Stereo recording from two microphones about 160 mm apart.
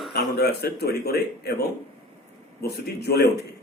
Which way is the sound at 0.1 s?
90° left.